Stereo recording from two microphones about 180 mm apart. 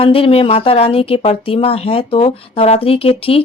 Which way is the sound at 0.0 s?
30° left (ahead or behind).